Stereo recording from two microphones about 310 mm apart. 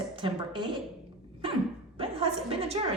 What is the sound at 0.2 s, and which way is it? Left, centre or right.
Speech, centre.